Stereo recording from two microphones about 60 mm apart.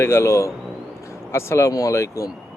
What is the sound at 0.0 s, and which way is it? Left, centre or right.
Speech, left.